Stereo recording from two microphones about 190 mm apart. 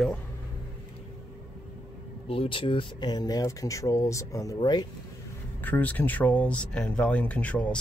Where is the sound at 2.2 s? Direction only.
30° left (ahead or behind).